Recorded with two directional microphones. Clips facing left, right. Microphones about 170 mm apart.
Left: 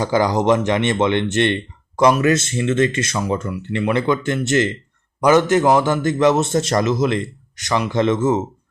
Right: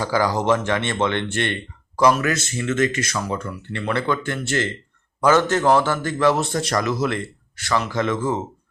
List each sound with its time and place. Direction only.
0.0 s a man's voice: 20° left (ahead or behind)